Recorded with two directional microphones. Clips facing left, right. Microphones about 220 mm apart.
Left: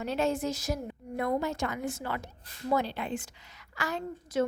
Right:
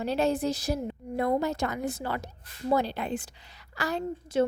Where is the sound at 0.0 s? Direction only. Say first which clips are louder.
Right 3 dB; 35° right (ahead or behind).